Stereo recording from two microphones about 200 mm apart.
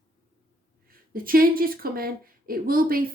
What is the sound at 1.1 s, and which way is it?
A woman's voice, 45° right (ahead or behind).